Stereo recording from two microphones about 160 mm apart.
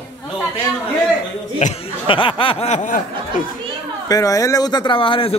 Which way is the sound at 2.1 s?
30° left (ahead or behind).